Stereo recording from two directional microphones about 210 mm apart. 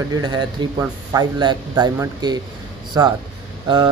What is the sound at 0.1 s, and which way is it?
Speech, 20° right (ahead or behind).